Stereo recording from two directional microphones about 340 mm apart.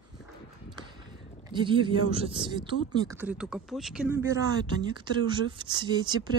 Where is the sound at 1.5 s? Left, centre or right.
Centre.